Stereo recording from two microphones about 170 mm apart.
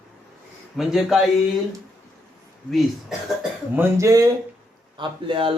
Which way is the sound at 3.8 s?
15° right (ahead or behind).